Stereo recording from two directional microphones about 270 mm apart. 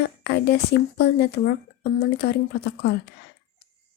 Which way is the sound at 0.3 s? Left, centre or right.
Left.